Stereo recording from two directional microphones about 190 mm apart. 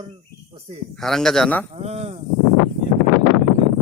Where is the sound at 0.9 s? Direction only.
Centre (ahead or behind).